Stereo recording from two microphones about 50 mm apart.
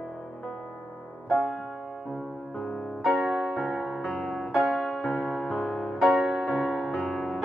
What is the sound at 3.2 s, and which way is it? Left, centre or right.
Music, centre.